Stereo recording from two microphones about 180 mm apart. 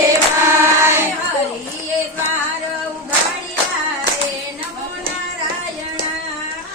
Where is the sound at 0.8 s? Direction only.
15° right (ahead or behind).